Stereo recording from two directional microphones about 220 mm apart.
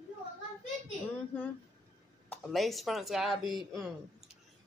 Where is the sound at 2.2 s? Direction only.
5° left (ahead or behind).